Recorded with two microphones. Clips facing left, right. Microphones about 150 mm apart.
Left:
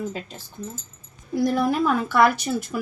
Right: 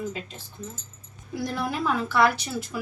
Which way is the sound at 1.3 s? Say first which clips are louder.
Left 8 dB; 45° left (ahead or behind).